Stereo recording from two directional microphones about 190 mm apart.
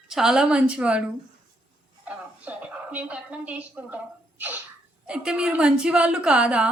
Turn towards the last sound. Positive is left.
turn(degrees=-5)  # may be behind; listen again after turning